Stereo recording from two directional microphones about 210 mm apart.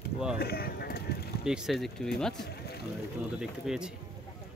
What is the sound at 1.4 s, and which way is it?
Speech, 5° right (ahead or behind).